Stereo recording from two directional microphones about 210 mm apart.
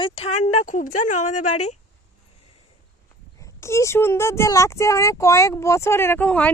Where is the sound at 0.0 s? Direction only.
25° left (ahead or behind).